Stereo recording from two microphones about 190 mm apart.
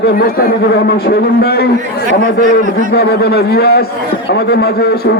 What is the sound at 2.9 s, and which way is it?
A man's voice, 55° left (ahead or behind).